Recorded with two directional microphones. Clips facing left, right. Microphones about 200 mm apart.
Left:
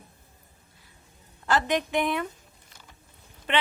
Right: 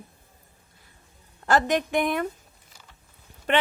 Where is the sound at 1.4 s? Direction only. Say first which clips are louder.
Right 3 dB; 45° right (ahead or behind).